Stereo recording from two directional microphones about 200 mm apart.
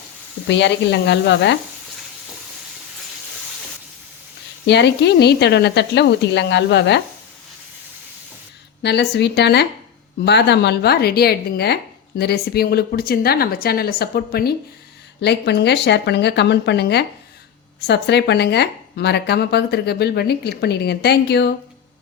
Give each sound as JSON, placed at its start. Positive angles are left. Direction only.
{"t": 0.4, "sound": "speech", "side_deg": 60}
{"t": 4.6, "sound": "speech", "side_deg": 60}
{"t": 8.8, "sound": "speech", "side_deg": 60}